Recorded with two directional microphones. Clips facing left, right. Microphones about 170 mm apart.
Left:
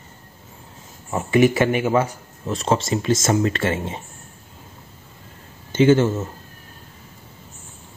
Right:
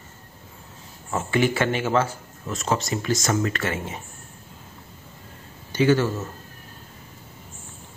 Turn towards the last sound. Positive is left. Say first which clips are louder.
# left 4 dB
turn(degrees=25)  # may be behind; listen again after turning